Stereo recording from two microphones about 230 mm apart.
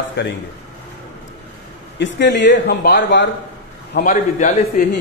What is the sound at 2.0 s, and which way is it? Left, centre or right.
A man's voice, left.